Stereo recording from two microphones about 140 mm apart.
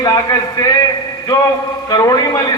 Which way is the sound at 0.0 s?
25° left (ahead or behind).